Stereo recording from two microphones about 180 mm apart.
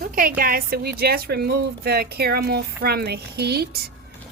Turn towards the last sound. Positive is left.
turn(degrees=-60)  # may be behind; listen again after turning